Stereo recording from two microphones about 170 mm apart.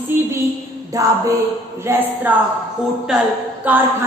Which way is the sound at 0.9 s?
20° right (ahead or behind).